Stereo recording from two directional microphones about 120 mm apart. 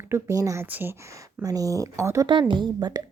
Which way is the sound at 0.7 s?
15° right (ahead or behind).